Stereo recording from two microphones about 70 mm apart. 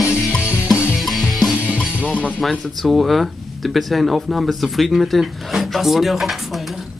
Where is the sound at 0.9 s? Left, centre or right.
Centre.